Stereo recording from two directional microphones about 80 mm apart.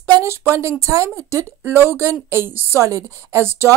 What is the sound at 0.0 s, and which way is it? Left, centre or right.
Speech, right.